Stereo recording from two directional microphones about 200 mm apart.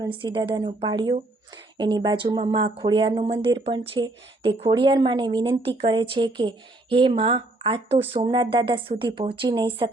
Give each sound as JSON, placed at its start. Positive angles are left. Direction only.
{"t": 0.0, "sound": "speech", "side_deg": -25}